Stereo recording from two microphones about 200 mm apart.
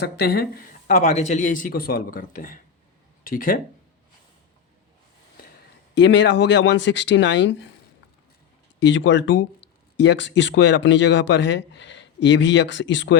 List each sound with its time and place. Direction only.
0.0 s speech: 55° left (ahead or behind)
5.9 s speech: 65° left (ahead or behind)
8.8 s speech: 65° left (ahead or behind)